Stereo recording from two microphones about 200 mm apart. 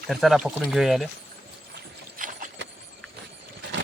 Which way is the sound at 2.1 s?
40° right (ahead or behind).